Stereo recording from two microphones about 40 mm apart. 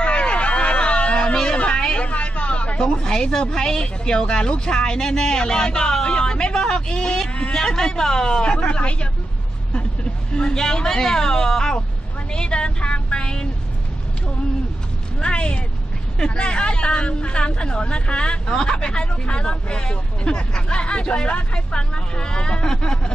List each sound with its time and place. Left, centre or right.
0.0 s hubbub: left
2.0 s a sound: left
2.8 s speech: centre
10.3 s speech: centre
12.3 s a sound: left
15.2 s speech: left